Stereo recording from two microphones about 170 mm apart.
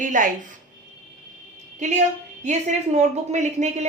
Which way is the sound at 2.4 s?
45° right (ahead or behind).